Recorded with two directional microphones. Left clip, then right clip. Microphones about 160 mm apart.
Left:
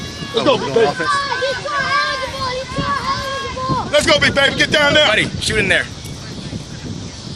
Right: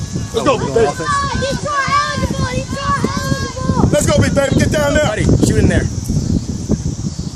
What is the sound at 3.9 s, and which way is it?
Speech, 90° right.